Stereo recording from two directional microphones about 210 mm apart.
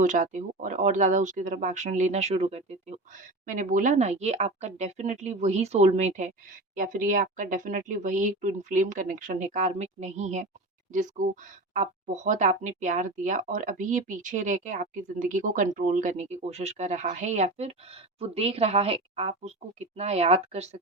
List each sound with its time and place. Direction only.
0.0 s speech: 35° right (ahead or behind)